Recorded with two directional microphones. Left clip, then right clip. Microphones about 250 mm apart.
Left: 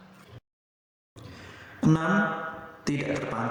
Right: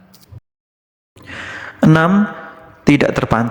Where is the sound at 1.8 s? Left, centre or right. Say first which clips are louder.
Right 13 dB; right.